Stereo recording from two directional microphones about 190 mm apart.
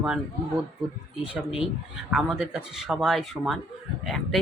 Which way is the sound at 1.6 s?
5° right (ahead or behind).